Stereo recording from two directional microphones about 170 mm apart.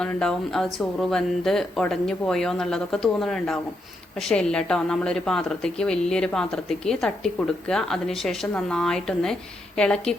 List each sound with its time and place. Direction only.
0.0 s a woman's voice: 5° left (ahead or behind)